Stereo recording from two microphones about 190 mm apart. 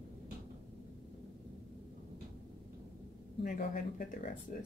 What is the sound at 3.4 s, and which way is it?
Speech, 45° left (ahead or behind).